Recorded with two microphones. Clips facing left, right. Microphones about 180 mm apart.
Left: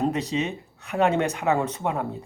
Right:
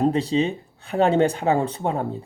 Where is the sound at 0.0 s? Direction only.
30° right (ahead or behind).